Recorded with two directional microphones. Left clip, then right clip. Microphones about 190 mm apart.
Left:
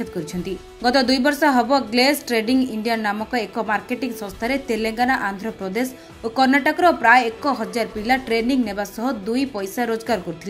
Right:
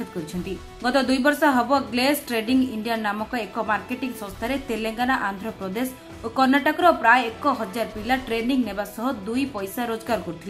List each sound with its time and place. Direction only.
0.8 s a woman's voice: 15° left (ahead or behind)